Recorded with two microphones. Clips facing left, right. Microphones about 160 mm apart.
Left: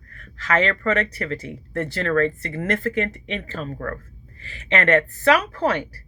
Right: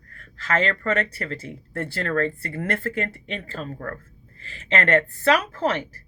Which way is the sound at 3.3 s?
40° right (ahead or behind).